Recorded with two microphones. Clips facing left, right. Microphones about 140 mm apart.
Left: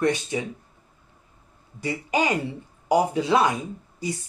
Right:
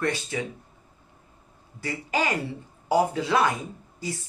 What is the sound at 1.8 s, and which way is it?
Speech, 20° left (ahead or behind).